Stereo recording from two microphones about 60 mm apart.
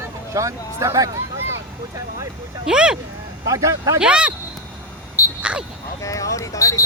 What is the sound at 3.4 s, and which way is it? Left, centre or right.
Speech, right.